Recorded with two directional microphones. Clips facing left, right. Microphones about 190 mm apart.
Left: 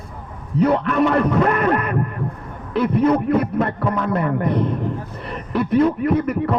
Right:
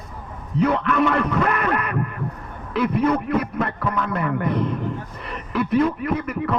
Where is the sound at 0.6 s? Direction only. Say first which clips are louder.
Left 3 dB; 35° left (ahead or behind).